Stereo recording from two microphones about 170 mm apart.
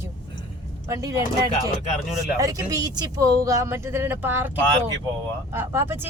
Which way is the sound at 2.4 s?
20° right (ahead or behind).